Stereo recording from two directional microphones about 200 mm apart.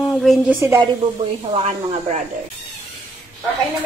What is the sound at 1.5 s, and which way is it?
Speech, 35° right (ahead or behind).